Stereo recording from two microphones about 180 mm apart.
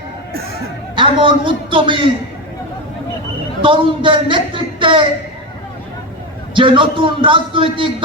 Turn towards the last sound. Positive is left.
turn(degrees=-30)  # may be behind; listen again after turning